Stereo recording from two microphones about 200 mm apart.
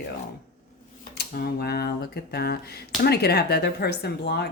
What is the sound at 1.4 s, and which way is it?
Speech, 50° left (ahead or behind).